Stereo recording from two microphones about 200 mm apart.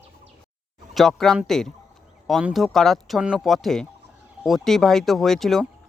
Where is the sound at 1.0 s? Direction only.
Centre (ahead or behind).